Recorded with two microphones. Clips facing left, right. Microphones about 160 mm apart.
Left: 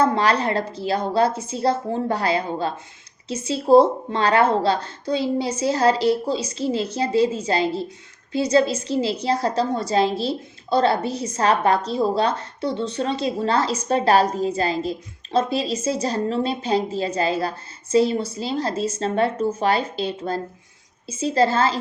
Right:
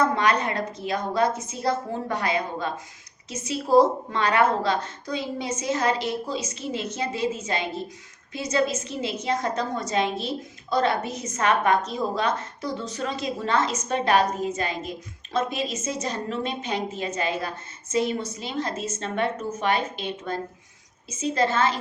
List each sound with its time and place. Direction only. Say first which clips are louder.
0.0 s a woman's voice: left 3 dB; 30° left (ahead or behind)